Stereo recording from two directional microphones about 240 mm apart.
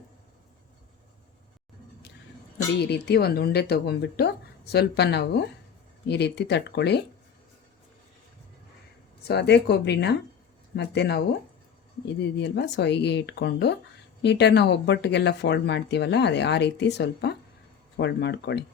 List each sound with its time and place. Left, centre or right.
2.7 s speech: left
9.2 s speech: left
12.4 s speech: left